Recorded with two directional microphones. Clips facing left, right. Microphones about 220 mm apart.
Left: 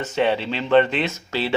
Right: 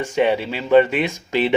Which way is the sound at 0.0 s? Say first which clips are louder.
Right 3 dB; 10° right (ahead or behind).